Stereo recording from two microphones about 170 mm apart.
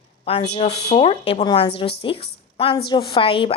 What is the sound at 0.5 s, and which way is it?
Speech, 40° left (ahead or behind).